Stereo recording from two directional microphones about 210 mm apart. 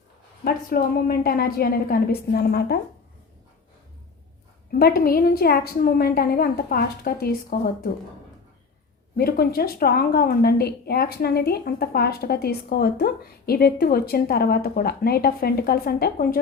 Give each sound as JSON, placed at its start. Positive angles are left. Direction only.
{"t": 0.4, "sound": "a woman's voice", "side_deg": 45}
{"t": 4.7, "sound": "a woman's voice", "side_deg": 45}
{"t": 9.1, "sound": "a woman's voice", "side_deg": 45}